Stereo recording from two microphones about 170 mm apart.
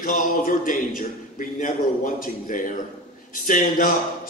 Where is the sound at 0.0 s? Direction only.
50° left (ahead or behind).